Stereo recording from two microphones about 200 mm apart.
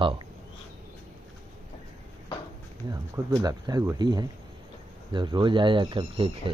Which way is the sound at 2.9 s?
15° right (ahead or behind).